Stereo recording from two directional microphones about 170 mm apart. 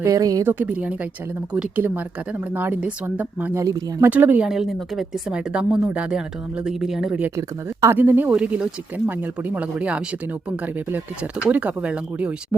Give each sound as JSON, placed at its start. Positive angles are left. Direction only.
{"t": 0.0, "sound": "a woman's voice", "side_deg": -20}
{"t": 0.6, "sound": "a woman's voice", "side_deg": -10}
{"t": 7.3, "sound": "speech", "side_deg": -15}